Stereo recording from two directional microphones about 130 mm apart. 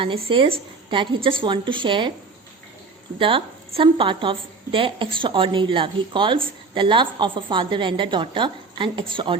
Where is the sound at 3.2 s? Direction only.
40° right (ahead or behind).